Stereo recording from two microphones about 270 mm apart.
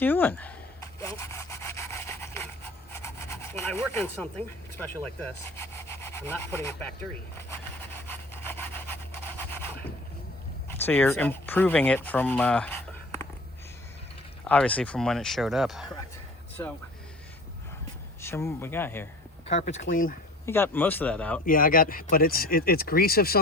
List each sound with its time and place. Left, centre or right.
0.0 s a sound: centre
7.3 s sawing: centre
10.7 s speech: centre
14.4 s speech: centre
16.6 s speech: centre
18.2 s speech: centre
19.5 s speech: left
20.4 s speech: centre
21.4 s speech: left